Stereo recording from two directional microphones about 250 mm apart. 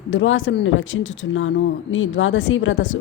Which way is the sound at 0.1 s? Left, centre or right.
Left.